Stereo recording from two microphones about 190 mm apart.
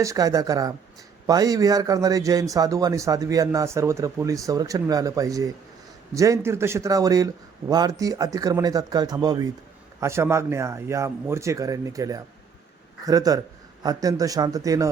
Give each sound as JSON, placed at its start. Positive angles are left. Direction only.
{"t": 0.0, "sound": "speech", "side_deg": -15}